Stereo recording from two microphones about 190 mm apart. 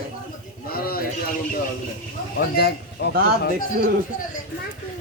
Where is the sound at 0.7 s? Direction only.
50° left (ahead or behind).